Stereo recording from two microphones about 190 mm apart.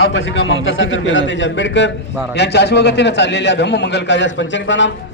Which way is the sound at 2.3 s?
60° left (ahead or behind).